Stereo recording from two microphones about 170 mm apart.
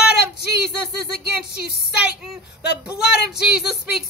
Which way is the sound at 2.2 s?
5° right (ahead or behind).